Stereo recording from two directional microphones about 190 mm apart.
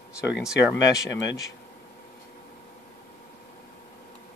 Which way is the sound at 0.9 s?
65° left (ahead or behind).